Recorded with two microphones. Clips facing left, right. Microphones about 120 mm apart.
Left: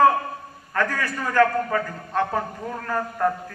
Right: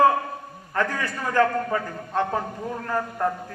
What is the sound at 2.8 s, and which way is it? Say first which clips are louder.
Speech: left 1 dB; 20° right (ahead or behind).